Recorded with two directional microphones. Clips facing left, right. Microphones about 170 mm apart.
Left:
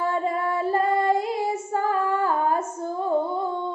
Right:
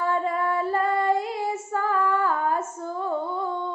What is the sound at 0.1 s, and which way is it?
Child singing, 15° left (ahead or behind).